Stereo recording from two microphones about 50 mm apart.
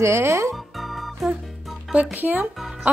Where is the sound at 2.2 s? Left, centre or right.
Right.